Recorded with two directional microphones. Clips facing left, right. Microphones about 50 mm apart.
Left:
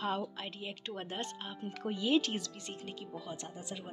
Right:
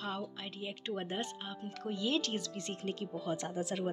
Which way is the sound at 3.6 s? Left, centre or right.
Right.